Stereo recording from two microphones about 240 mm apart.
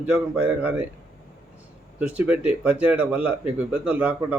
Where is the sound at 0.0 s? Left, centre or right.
Centre.